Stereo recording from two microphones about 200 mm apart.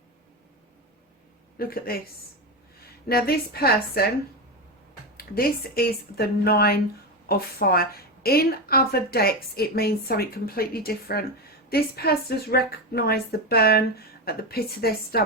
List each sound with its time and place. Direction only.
1.5 s a woman's voice: 45° left (ahead or behind)
3.1 s a woman's voice: 50° left (ahead or behind)
5.1 s a woman's voice: 50° left (ahead or behind)